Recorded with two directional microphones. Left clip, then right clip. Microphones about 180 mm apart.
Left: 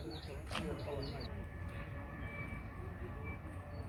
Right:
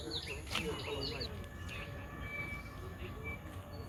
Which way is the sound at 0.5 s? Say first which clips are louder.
Right 4 dB; 10° left (ahead or behind).